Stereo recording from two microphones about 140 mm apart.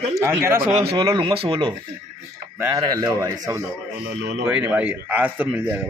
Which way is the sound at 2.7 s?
25° right (ahead or behind).